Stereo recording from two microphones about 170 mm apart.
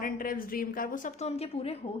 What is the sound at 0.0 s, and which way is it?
A woman's voice, 55° left (ahead or behind).